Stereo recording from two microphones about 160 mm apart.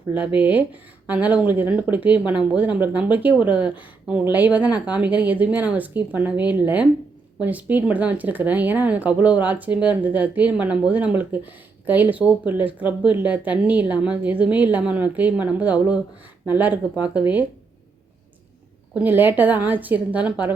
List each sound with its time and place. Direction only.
0.1 s speech: 10° right (ahead or behind)
18.9 s speech: 10° right (ahead or behind)